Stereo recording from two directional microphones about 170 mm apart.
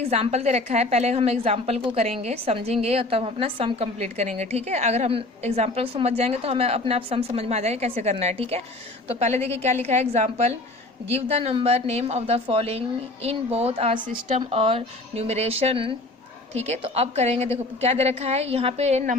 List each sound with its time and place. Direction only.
0.0 s a woman's voice: 40° right (ahead or behind)